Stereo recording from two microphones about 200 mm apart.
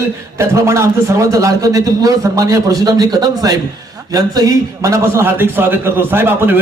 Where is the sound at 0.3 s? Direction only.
15° right (ahead or behind).